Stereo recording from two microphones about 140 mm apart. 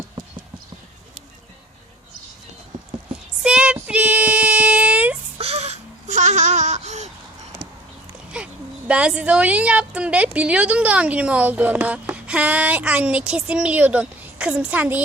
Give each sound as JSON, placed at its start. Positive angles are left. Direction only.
{"t": 3.4, "sound": "child singing", "side_deg": -5}
{"t": 5.4, "sound": "babbling", "side_deg": -45}
{"t": 8.3, "sound": "a sound", "side_deg": -5}
{"t": 8.9, "sound": "a woman's voice", "side_deg": -5}